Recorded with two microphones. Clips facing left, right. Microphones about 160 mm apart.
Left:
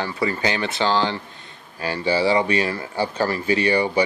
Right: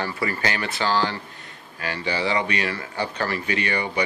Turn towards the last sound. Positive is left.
turn(degrees=30)  # may be behind; listen again after turning